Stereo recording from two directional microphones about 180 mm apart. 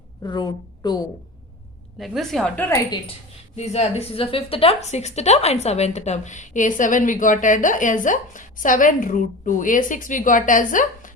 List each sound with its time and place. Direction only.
0.2 s a woman's voice: 25° left (ahead or behind)
2.0 s a woman's voice: centre (ahead or behind)
3.5 s a woman's voice: 40° left (ahead or behind)